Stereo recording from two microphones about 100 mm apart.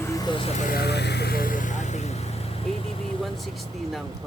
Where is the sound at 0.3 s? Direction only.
60° left (ahead or behind).